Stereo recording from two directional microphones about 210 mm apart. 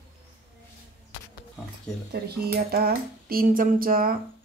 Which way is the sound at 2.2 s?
50° right (ahead or behind).